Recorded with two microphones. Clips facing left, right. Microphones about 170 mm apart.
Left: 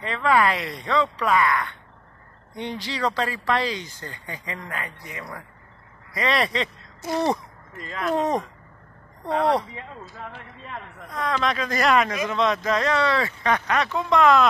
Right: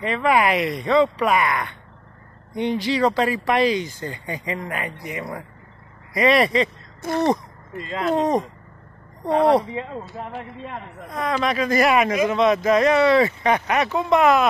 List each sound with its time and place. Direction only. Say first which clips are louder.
0.0 s speech: right 2 dB; 15° right (ahead or behind)
7.0 s speech: right 2 dB; 55° right (ahead or behind)
7.7 s speech: right 3 dB; 25° right (ahead or behind)
11.1 s speech: right 2 dB; 15° right (ahead or behind)